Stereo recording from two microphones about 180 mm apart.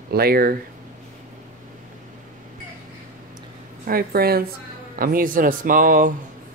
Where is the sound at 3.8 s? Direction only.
55° right (ahead or behind).